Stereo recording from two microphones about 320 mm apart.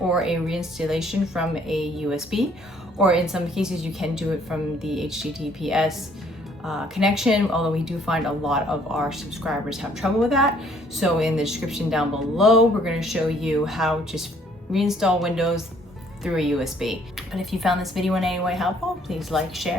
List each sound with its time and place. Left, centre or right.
0.1 s speech: centre